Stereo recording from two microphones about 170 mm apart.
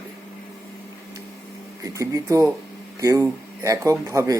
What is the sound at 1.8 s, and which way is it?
A man's voice, 20° right (ahead or behind).